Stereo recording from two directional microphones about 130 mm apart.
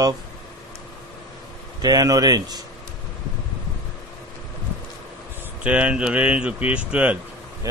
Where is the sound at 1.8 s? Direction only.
30° right (ahead or behind).